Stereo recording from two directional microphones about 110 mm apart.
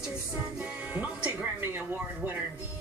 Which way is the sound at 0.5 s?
10° right (ahead or behind).